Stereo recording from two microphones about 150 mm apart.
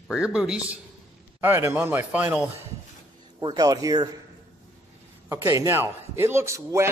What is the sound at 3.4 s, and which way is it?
Speech, 25° right (ahead or behind).